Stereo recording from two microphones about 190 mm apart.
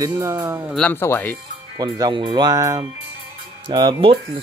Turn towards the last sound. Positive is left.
turn(degrees=-25)  # may be behind; listen again after turning